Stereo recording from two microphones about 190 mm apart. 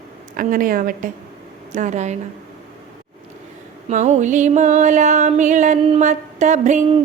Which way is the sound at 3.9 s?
40° right (ahead or behind).